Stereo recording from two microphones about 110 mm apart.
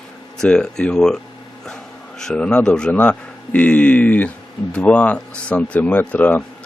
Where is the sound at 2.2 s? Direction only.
5° left (ahead or behind).